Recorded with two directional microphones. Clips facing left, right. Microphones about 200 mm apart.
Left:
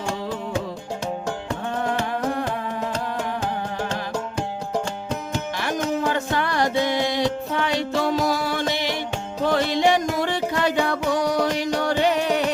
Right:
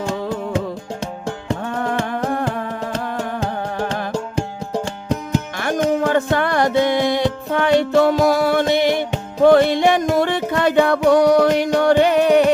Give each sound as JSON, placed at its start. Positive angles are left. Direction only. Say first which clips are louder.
{"t": 5.5, "sound": "music", "louder": "right 6 dB", "side_deg": -50}